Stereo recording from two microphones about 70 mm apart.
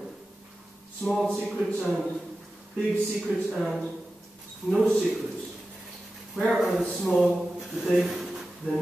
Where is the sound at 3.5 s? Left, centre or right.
Centre.